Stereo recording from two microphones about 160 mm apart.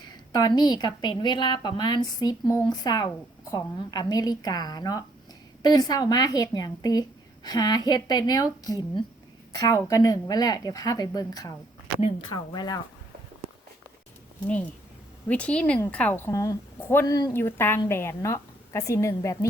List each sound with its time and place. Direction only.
0.3 s a woman's voice: 25° left (ahead or behind)
12.5 s a woman's voice: 25° left (ahead or behind)
15.3 s a woman's voice: 10° left (ahead or behind)